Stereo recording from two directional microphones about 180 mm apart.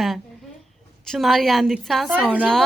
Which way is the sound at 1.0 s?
Centre (ahead or behind).